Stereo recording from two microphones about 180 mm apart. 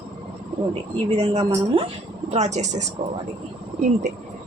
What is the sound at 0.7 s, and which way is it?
Speech, 35° right (ahead or behind).